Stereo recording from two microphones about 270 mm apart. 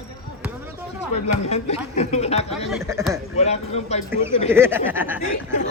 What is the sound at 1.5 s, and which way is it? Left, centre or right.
Speech, left.